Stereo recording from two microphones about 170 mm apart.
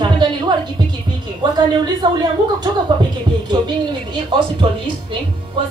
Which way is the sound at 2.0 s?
25° right (ahead or behind).